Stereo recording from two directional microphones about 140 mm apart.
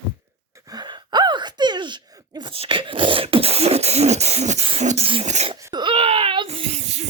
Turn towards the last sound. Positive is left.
turn(degrees=-50)  # may be behind; listen again after turning